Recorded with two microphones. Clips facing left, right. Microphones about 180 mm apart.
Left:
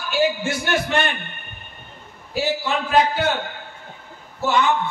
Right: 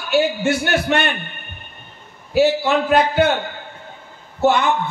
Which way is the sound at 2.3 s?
65° right (ahead or behind).